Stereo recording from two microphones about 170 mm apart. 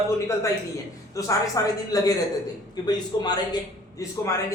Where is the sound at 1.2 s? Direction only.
20° left (ahead or behind).